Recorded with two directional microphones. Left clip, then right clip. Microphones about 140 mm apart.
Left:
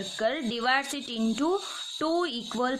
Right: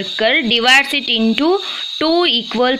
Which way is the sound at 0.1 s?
20° right (ahead or behind).